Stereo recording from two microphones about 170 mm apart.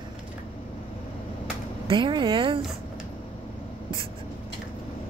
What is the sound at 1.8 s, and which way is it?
Speech, 30° right (ahead or behind).